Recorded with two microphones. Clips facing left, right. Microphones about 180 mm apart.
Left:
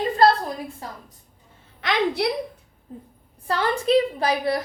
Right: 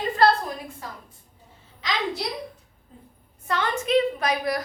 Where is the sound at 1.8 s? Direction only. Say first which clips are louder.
Left 6 dB; 60° left (ahead or behind).